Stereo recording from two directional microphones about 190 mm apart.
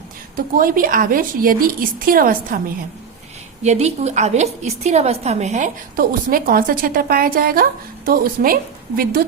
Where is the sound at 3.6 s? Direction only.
35° right (ahead or behind).